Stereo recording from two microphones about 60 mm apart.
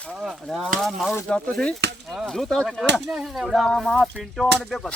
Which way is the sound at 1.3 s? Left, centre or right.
Centre.